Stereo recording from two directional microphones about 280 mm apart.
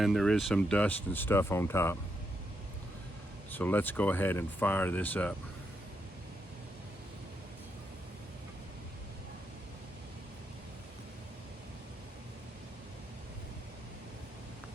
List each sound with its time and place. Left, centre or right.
0.0 s speech: centre
3.5 s speech: centre